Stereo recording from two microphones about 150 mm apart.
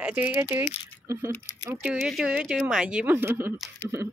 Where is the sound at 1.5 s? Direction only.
20° left (ahead or behind).